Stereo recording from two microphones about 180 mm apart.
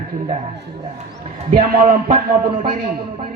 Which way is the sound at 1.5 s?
50° right (ahead or behind).